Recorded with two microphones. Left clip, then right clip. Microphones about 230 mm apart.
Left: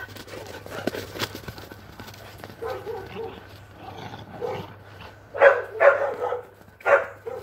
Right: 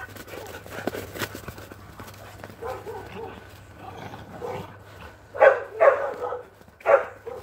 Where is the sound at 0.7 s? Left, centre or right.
Left.